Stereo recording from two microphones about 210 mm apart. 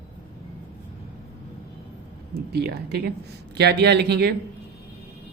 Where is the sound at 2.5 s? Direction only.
50° right (ahead or behind).